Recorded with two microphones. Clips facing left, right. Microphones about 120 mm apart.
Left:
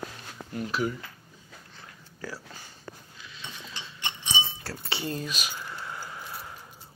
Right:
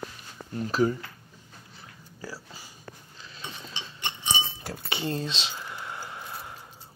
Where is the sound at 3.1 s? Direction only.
40° right (ahead or behind).